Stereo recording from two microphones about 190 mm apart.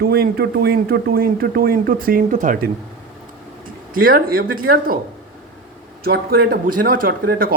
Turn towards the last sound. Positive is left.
turn(degrees=-50)  # may be behind; listen again after turning